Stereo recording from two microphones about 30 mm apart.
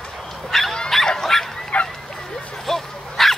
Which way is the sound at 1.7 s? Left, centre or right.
Left.